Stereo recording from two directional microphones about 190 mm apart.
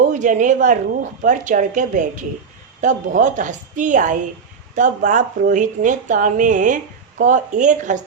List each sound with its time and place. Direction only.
0.1 s speech: 40° right (ahead or behind)